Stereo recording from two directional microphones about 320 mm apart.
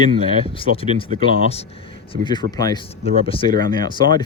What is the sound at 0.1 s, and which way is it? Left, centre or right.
Speech, centre.